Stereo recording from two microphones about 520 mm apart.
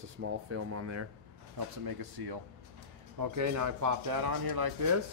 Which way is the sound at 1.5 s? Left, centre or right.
Right.